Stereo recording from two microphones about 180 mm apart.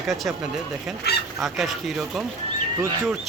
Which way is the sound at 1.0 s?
65° left (ahead or behind).